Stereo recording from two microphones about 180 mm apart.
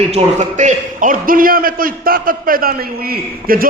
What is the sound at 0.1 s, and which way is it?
A man's voice, 35° right (ahead or behind).